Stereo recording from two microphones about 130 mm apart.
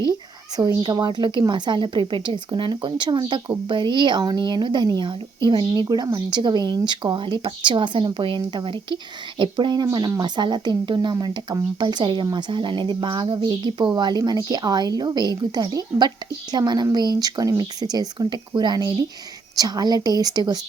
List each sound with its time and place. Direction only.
0.8 s speech: 35° right (ahead or behind)